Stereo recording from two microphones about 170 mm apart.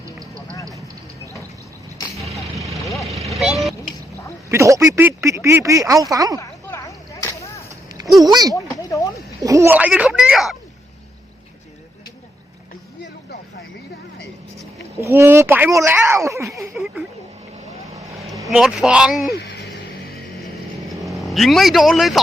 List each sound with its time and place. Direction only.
2.1 s vehicle: centre (ahead or behind)
4.4 s speech: 15° right (ahead or behind)
6.4 s arrow: 20° left (ahead or behind)
8.2 s speech: 20° right (ahead or behind)
8.5 s speech: 20° left (ahead or behind)
9.4 s speech: 20° right (ahead or behind); by 10.6 s centre (ahead or behind)
15.0 s speech: 15° right (ahead or behind)
16.7 s speech: centre (ahead or behind)
18.4 s speech: 5° right (ahead or behind)
19.3 s a sound: 70° left (ahead or behind)
20.4 s vehicle: centre (ahead or behind)